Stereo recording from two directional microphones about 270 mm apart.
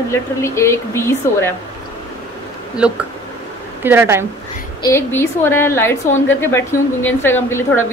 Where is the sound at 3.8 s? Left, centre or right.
Centre.